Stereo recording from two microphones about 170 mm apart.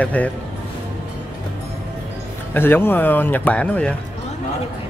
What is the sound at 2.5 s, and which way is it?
Speech, 10° left (ahead or behind).